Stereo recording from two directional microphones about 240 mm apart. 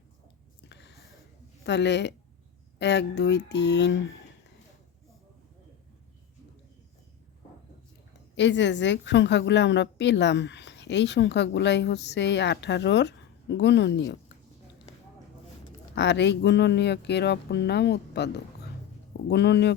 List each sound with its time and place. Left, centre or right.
0.7 s a sound: left
1.6 s a woman's voice: left
8.4 s a woman's voice: left
16.0 s a woman's voice: left